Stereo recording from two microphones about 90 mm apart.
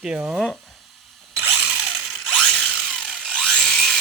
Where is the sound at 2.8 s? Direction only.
5° left (ahead or behind).